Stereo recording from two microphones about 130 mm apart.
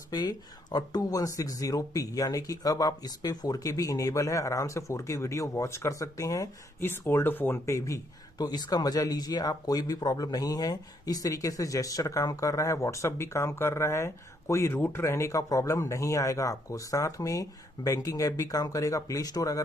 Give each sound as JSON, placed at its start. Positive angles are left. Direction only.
{"t": 0.1, "sound": "speech", "side_deg": 30}